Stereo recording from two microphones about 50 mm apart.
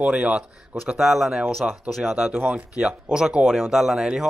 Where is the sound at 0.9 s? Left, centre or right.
Centre.